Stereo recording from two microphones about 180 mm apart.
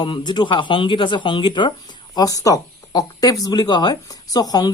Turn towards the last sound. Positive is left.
turn(degrees=20)  # may be behind; listen again after turning